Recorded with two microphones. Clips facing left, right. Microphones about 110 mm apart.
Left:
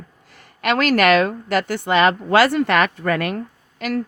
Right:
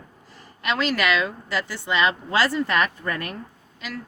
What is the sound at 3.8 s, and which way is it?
Speech, 55° left (ahead or behind).